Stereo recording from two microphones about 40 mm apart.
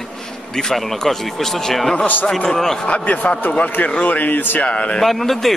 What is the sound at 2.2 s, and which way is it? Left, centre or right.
Speech, centre.